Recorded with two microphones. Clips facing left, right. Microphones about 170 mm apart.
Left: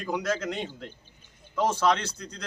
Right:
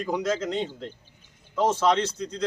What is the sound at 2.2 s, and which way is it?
Speech, 20° right (ahead or behind).